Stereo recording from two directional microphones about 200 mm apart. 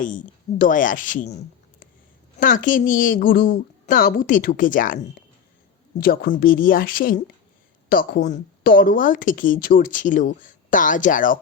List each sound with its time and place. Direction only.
0.0 s speech: 40° left (ahead or behind)
2.4 s a woman's voice: 40° left (ahead or behind)